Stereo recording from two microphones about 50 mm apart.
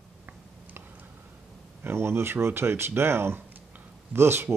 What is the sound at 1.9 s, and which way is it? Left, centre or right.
Speech, right.